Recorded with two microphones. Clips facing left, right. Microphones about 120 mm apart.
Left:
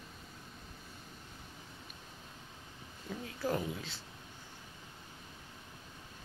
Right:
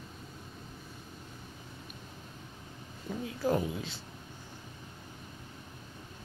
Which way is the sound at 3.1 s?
20° right (ahead or behind).